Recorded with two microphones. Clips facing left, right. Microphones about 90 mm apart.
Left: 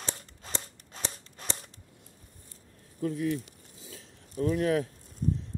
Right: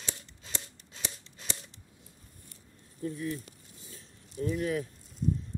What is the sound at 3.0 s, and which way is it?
Speech, 90° left.